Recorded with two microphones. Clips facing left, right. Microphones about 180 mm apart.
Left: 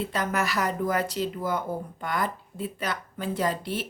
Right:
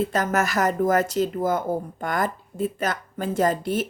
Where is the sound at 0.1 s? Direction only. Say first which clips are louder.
Right 5 dB; 45° right (ahead or behind).